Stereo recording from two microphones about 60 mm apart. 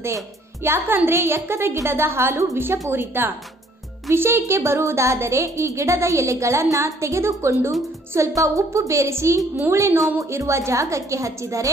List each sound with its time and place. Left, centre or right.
0.7 s a woman's voice: right
8.4 s a woman's voice: right